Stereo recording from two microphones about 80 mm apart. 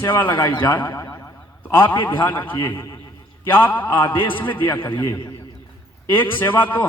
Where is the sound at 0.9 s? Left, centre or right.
Left.